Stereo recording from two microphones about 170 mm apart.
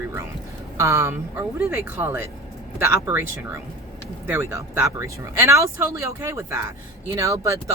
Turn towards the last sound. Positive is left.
turn(degrees=-20)  # may be behind; listen again after turning